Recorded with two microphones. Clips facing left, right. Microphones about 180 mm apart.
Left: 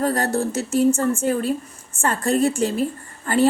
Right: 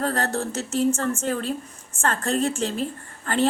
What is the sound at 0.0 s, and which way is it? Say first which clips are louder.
A woman's voice: left 4 dB; 10° left (ahead or behind).